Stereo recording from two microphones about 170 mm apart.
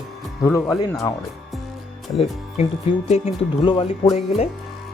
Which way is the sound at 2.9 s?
30° left (ahead or behind).